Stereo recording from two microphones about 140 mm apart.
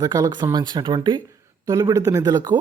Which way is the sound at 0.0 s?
25° right (ahead or behind).